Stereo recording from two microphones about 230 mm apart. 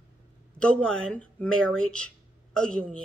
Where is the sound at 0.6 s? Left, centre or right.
Centre.